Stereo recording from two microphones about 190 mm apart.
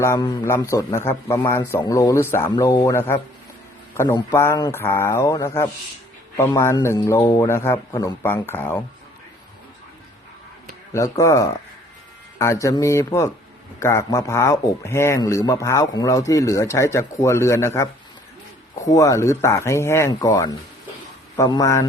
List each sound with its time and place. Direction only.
0.0 s speech: 15° left (ahead or behind)
10.9 s speech: 15° left (ahead or behind)